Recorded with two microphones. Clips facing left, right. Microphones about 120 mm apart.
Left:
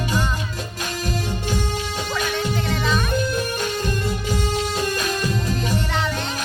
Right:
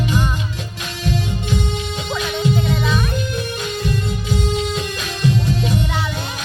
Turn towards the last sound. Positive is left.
turn(degrees=40)  # may be behind; listen again after turning